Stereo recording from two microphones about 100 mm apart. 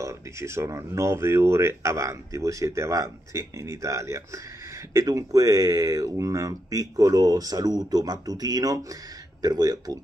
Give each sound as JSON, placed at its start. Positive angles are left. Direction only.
{"t": 0.0, "sound": "speech", "side_deg": -30}